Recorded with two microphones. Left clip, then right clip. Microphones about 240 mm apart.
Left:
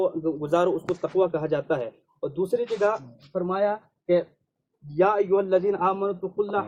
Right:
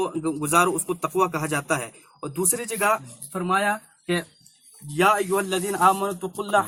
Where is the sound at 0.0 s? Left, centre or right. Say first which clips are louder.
Left 1 dB; right.